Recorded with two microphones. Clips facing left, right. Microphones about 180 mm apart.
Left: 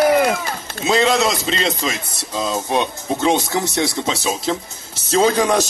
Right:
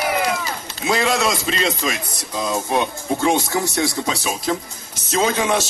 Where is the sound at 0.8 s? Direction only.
25° left (ahead or behind).